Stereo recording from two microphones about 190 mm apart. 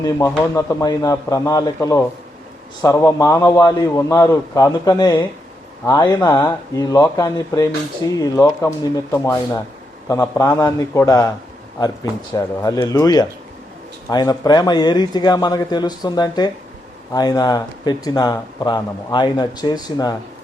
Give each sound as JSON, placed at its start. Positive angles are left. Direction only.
{"t": 0.0, "sound": "speech", "side_deg": 15}
{"t": 12.3, "sound": "speech", "side_deg": 20}